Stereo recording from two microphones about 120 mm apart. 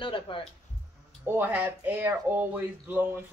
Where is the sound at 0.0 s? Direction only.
45° left (ahead or behind).